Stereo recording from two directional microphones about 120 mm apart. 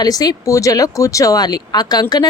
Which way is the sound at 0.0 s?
35° left (ahead or behind).